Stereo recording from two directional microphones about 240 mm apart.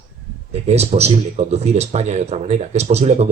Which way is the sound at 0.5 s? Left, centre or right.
Right.